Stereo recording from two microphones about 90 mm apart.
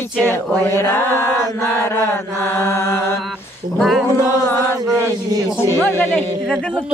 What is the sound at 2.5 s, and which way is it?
Mantra, 30° left (ahead or behind).